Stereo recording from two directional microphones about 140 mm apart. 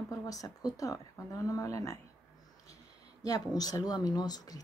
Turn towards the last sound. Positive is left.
turn(degrees=30)  # may be behind; listen again after turning